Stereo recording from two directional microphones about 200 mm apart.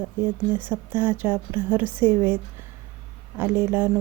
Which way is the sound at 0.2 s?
10° right (ahead or behind).